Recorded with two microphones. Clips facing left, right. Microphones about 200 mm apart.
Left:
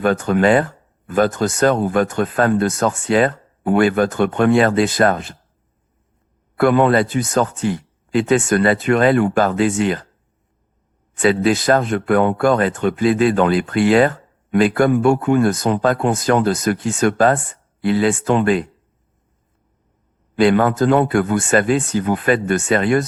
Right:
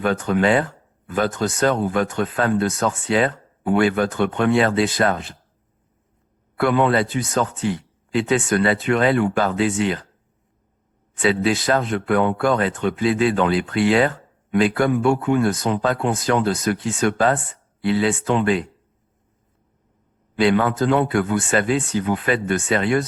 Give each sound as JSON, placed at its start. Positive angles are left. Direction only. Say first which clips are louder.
{"t": 0.0, "sound": "speech", "louder": "left 3 dB", "side_deg": 45}
{"t": 6.6, "sound": "speech", "louder": "left 4 dB", "side_deg": 45}
{"t": 11.1, "sound": "speech", "louder": "left 4 dB", "side_deg": 50}
{"t": 20.3, "sound": "speech", "louder": "left 4 dB", "side_deg": 50}